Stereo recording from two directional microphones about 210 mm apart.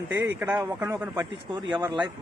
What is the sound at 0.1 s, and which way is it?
A man's voice, 10° right (ahead or behind).